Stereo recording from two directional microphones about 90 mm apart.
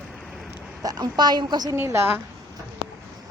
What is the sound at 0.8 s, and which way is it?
Speech, 50° right (ahead or behind).